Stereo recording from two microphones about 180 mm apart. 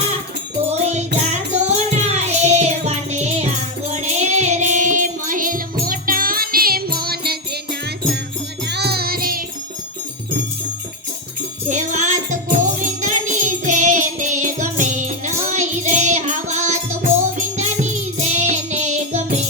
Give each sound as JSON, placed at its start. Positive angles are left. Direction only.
{"t": 0.7, "sound": "music", "side_deg": -40}
{"t": 11.7, "sound": "music", "side_deg": -40}